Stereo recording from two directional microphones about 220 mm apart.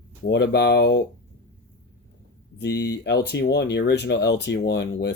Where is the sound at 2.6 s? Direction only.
50° left (ahead or behind).